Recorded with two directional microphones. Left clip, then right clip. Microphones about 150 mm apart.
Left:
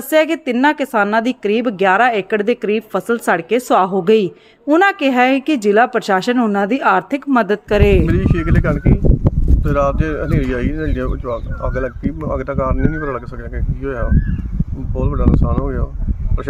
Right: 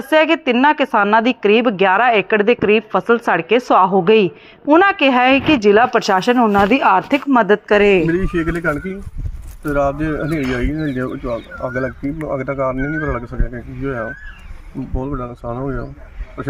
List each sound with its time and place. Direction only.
0.1 s a woman's voice: 30° left (ahead or behind)
8.1 s a woman's voice: 35° left (ahead or behind)
12.2 s a woman's voice: 20° left (ahead or behind)
12.5 s a woman's voice: 35° left (ahead or behind)